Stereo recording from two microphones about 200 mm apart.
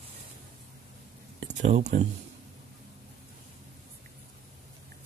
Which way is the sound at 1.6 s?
35° right (ahead or behind).